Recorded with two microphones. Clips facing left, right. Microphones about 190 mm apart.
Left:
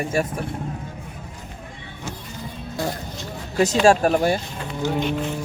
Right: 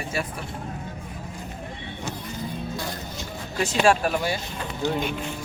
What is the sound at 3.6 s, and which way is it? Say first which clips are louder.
Speech: left 4 dB; 40° left (ahead or behind).